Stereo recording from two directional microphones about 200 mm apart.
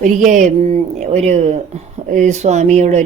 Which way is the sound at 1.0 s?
35° right (ahead or behind).